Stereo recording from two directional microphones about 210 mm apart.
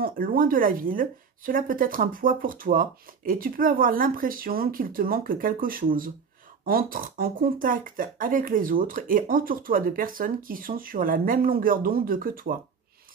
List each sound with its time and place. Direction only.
0.0 s speech: 40° right (ahead or behind)